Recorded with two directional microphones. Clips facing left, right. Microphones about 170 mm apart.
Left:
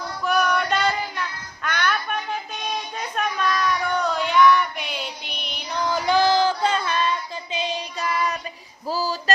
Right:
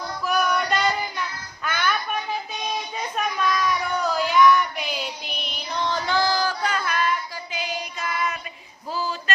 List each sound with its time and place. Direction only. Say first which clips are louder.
0.3 s music: left 1 dB; centre (ahead or behind)
1.6 s a sound: left 1 dB; 5° right (ahead or behind)
2.9 s child singing: even; 5° right (ahead or behind); by 8.4 s 35° left (ahead or behind)
8.9 s female singing: left 3 dB; 35° left (ahead or behind)